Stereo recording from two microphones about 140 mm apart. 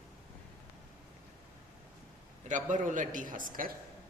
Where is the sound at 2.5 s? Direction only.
65° right (ahead or behind).